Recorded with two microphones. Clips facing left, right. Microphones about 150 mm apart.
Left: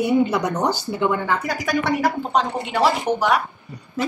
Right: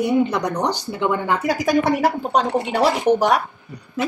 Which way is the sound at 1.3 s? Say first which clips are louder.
Right 4 dB; 30° right (ahead or behind).